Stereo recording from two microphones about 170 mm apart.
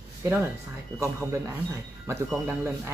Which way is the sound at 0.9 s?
15° right (ahead or behind).